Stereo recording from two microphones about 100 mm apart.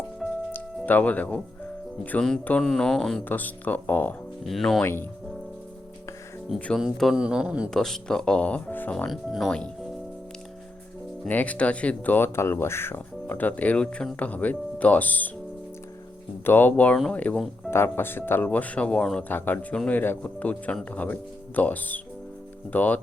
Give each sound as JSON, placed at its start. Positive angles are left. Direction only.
{"t": 0.5, "sound": "music", "side_deg": 20}
{"t": 2.4, "sound": "speech", "side_deg": 15}
{"t": 3.2, "sound": "speech", "side_deg": 15}
{"t": 4.4, "sound": "speech", "side_deg": 0}
{"t": 4.8, "sound": "speech", "side_deg": 25}
{"t": 6.7, "sound": "speech", "side_deg": 0}
{"t": 7.7, "sound": "speech", "side_deg": 5}
{"t": 9.0, "sound": "speech", "side_deg": 0}
{"t": 11.3, "sound": "speech", "side_deg": 15}
{"t": 16.5, "sound": "speech", "side_deg": 20}
{"t": 17.7, "sound": "speech", "side_deg": 25}